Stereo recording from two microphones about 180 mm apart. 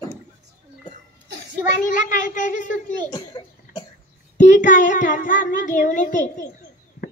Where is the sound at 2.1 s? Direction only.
45° left (ahead or behind).